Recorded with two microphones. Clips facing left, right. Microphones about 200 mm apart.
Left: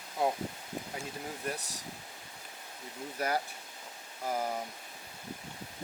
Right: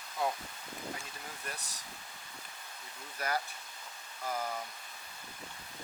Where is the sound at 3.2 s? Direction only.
5° left (ahead or behind).